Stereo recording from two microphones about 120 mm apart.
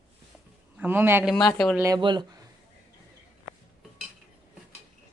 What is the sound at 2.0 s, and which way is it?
Speech, 40° right (ahead or behind).